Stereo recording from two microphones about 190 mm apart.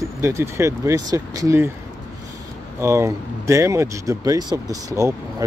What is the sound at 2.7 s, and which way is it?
Speech, 15° right (ahead or behind).